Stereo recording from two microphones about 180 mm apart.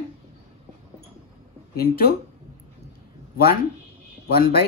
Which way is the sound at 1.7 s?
55° left (ahead or behind).